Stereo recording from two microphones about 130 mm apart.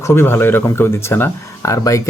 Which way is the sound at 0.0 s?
20° left (ahead or behind).